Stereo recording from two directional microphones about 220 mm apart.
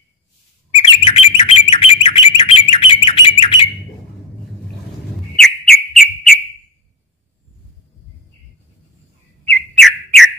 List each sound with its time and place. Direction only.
1.0 s bird: 25° left (ahead or behind)
5.3 s bird: centre (ahead or behind)
9.4 s bird: 5° left (ahead or behind)